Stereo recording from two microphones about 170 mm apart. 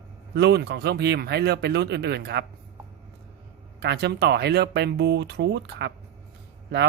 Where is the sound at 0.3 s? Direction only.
80° right.